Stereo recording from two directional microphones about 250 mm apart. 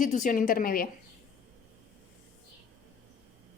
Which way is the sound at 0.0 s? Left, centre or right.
Left.